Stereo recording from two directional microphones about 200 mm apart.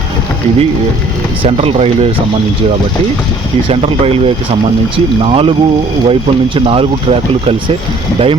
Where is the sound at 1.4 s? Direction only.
30° right (ahead or behind).